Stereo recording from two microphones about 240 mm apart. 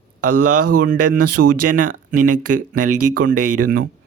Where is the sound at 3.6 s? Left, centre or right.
Right.